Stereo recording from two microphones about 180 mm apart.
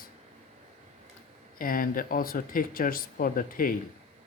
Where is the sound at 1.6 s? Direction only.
50° left (ahead or behind).